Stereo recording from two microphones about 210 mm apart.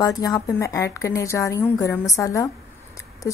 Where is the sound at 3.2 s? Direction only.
15° left (ahead or behind).